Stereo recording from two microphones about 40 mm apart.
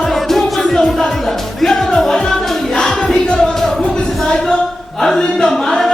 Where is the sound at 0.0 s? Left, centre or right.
Centre.